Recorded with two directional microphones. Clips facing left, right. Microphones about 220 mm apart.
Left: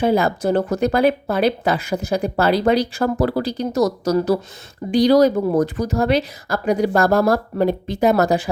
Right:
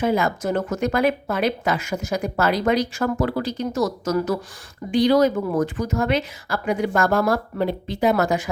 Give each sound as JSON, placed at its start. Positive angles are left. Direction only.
{"t": 0.0, "sound": "speech", "side_deg": 35}